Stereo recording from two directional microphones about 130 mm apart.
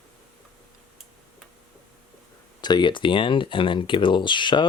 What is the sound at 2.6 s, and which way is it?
Speech, 35° left (ahead or behind).